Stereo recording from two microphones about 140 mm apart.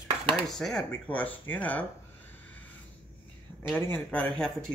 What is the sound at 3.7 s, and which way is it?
Speech, 15° left (ahead or behind).